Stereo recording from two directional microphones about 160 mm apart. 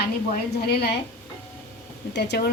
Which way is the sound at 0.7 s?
90° left.